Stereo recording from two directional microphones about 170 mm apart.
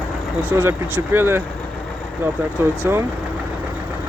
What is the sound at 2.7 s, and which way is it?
Speech, 15° right (ahead or behind).